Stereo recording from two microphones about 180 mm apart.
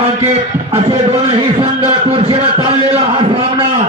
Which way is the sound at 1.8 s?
30° right (ahead or behind).